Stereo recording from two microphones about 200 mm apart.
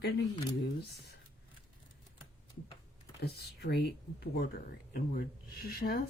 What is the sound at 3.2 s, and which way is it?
Speech, 55° left (ahead or behind).